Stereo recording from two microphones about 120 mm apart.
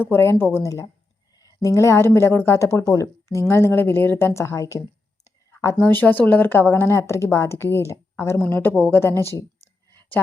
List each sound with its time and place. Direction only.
0.0 s speech: 20° left (ahead or behind)
5.2 s whispering: 25° left (ahead or behind)
5.8 s speech: 15° left (ahead or behind)